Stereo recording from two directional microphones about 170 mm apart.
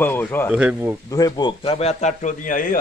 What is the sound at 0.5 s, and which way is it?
Speech, 5° right (ahead or behind).